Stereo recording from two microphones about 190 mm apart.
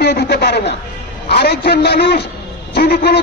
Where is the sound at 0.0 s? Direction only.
60° left (ahead or behind).